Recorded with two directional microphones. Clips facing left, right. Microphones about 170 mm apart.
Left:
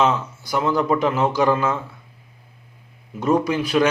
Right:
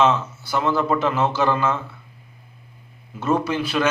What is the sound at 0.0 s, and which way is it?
A man's voice, 10° left (ahead or behind).